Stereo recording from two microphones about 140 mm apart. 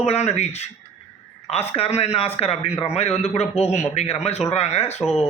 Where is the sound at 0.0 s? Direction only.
50° left (ahead or behind).